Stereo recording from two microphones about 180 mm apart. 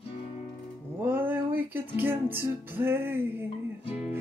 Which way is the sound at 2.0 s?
10° right (ahead or behind).